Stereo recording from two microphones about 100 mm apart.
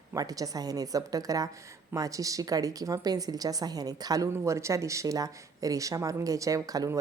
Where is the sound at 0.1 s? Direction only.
35° right (ahead or behind).